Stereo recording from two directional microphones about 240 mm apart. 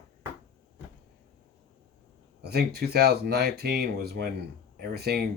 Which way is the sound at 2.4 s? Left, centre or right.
Right.